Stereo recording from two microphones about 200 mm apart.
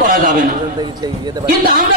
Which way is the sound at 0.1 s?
45° right (ahead or behind).